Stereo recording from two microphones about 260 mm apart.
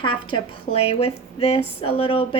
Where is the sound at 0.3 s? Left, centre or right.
Centre.